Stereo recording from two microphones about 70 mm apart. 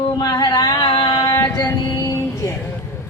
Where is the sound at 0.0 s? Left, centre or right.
Left.